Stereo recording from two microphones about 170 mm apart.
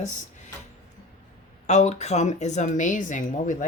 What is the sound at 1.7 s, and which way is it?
Speech, 40° left (ahead or behind).